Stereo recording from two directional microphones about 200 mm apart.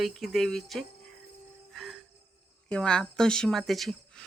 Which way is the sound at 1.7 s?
Centre (ahead or behind).